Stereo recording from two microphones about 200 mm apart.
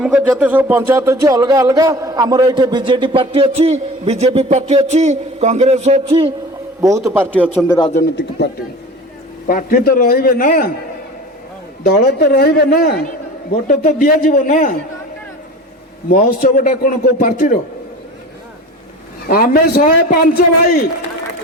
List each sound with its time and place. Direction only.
0.0 s speech: 5° right (ahead or behind); by 6.3 s 30° right (ahead or behind)
6.8 s a man's voice: 15° right (ahead or behind)
7.6 s speech: centre (ahead or behind)
7.9 s speech: 55° left (ahead or behind)
9.5 s a man's voice: 45° left (ahead or behind)
11.8 s a man's voice: 50° left (ahead or behind)
16.0 s a man's voice: 45° left (ahead or behind)
19.3 s a man's voice: 50° left (ahead or behind)